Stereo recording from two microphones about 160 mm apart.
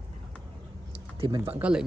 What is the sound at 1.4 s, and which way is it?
Speech, 10° right (ahead or behind).